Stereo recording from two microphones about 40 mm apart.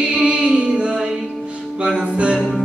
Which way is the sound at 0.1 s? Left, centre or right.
Right.